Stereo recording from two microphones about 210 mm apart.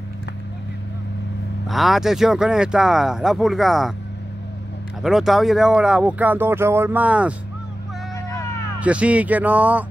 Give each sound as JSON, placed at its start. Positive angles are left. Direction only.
{"t": 1.7, "sound": "speech", "side_deg": 0}
{"t": 5.0, "sound": "speech", "side_deg": 0}
{"t": 8.3, "sound": "a sound", "side_deg": 15}
{"t": 8.7, "sound": "speech", "side_deg": -5}